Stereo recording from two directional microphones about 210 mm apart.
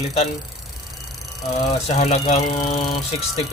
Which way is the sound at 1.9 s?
30° left (ahead or behind).